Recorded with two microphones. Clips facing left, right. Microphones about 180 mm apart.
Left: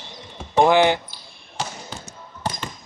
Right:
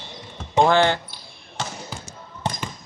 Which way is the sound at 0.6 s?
15° left (ahead or behind).